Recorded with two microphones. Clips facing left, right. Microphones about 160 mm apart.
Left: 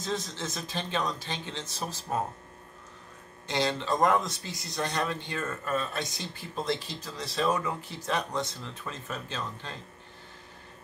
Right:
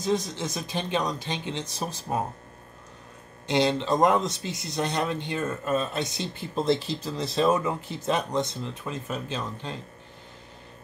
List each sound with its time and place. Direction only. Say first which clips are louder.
0.0 s speech: right 6 dB; 15° right (ahead or behind)
3.4 s speech: right 5 dB; 20° right (ahead or behind)